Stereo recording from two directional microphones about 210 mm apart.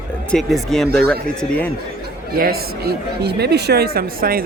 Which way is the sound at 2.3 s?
45° right (ahead or behind).